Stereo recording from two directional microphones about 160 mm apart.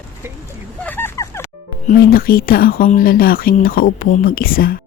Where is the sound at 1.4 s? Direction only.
60° left (ahead or behind).